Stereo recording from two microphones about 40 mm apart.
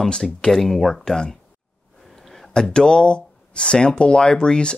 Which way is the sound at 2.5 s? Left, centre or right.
Centre.